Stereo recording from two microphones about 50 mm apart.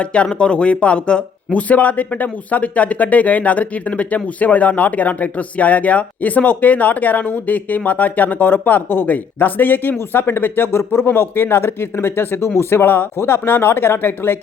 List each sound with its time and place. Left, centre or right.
0.0 s speech: left